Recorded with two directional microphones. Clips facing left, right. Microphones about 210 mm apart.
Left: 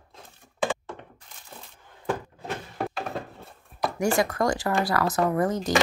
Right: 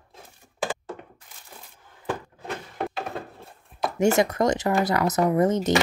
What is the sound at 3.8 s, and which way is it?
Speech, 25° right (ahead or behind).